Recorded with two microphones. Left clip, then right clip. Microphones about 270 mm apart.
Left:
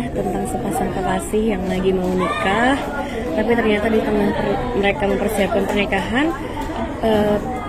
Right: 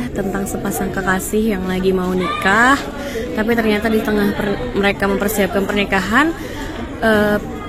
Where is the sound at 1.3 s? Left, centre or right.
Right.